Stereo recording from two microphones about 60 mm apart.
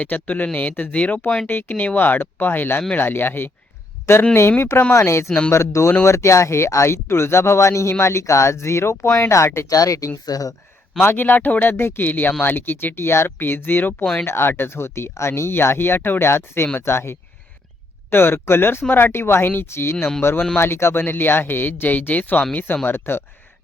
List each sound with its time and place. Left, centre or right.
0.0 s speech: left
1.7 s speech: left
9.6 s speech: left
10.2 s speech: left
11.0 s speech: left
14.0 s speech: centre
14.3 s speech: left